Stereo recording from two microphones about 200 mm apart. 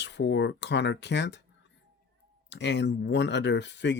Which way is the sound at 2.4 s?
60° left (ahead or behind).